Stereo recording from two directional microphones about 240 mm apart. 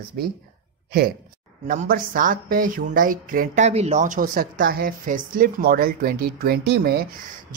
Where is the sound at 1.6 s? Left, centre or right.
Right.